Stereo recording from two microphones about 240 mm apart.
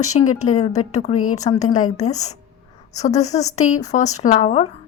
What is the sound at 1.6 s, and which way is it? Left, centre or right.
Speech, left.